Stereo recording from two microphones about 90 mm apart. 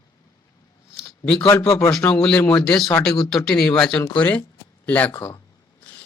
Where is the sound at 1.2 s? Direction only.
10° left (ahead or behind).